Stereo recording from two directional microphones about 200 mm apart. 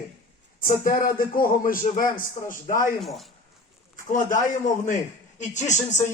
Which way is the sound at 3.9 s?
40° left (ahead or behind).